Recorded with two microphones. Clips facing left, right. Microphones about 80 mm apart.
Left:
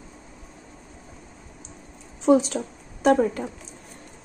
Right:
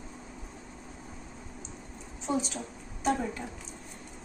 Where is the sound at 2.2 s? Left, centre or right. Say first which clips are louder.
Left 13 dB; left.